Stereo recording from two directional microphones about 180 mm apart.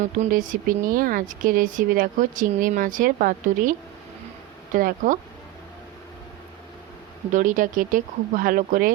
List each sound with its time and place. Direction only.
0.0 s speech: 45° right (ahead or behind)
7.3 s speech: 45° right (ahead or behind)